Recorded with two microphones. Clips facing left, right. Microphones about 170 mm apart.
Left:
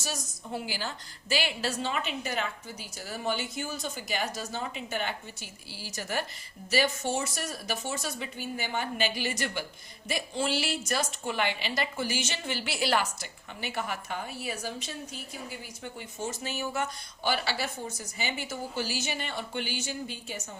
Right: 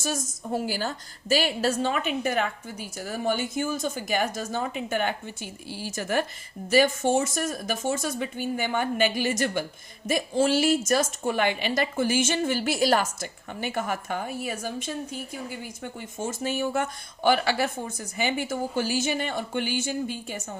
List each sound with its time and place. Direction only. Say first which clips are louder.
0.0 s a woman's voice: right 7 dB; 50° right (ahead or behind)